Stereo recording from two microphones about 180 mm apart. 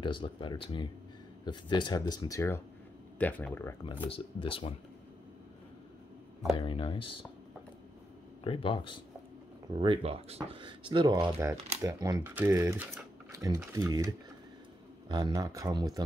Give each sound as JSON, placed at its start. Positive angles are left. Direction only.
{"t": 0.0, "sound": "speech", "side_deg": 25}
{"t": 4.1, "sound": "speech", "side_deg": 30}
{"t": 6.5, "sound": "speech", "side_deg": 30}
{"t": 8.5, "sound": "speech", "side_deg": 30}
{"t": 9.8, "sound": "speech", "side_deg": -30}